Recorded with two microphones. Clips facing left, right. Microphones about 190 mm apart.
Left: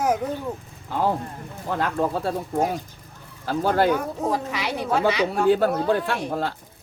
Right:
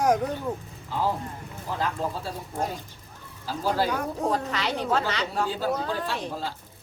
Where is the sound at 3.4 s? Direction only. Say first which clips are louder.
Left 5 dB; 60° left (ahead or behind).